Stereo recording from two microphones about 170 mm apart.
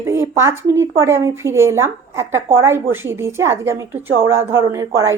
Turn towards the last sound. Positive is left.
turn(degrees=-20)  # may be behind; listen again after turning